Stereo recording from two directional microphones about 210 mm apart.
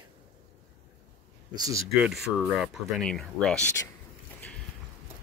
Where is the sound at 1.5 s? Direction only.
20° right (ahead or behind).